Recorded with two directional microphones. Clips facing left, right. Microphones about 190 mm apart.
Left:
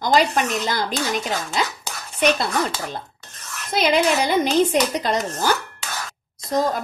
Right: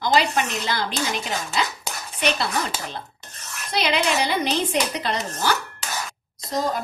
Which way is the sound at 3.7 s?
45° left (ahead or behind).